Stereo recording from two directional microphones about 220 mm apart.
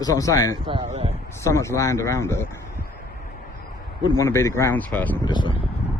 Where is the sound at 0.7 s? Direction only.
25° right (ahead or behind).